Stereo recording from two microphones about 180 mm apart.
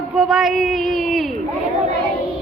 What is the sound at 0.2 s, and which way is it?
Speech, centre (ahead or behind).